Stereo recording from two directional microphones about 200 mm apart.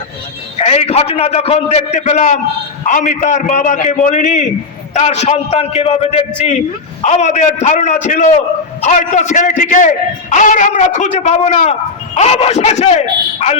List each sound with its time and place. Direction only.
0.6 s a man's voice: 30° left (ahead or behind)